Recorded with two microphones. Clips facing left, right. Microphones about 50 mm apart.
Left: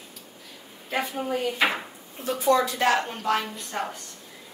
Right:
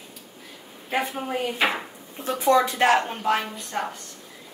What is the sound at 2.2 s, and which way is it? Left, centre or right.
Speech, right.